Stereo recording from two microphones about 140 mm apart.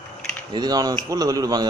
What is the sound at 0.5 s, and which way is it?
A man's voice, 30° right (ahead or behind).